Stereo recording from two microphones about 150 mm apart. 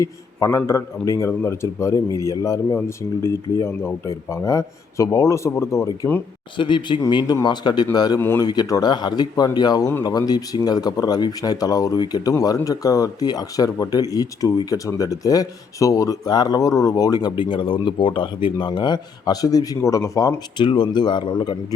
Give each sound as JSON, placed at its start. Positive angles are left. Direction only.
{"t": 0.0, "sound": "speech", "side_deg": 20}
{"t": 6.6, "sound": "a man's voice", "side_deg": 30}
{"t": 8.2, "sound": "speech", "side_deg": 15}
{"t": 8.4, "sound": "a man's voice", "side_deg": 25}